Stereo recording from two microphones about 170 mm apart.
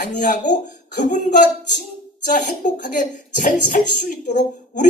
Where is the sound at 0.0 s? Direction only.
45° left (ahead or behind).